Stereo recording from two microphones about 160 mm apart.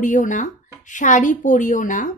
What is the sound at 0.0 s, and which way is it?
Speech, 55° left (ahead or behind).